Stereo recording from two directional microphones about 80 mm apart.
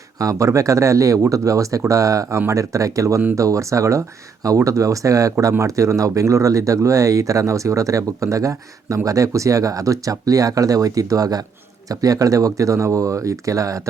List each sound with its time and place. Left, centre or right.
0.2 s speech: right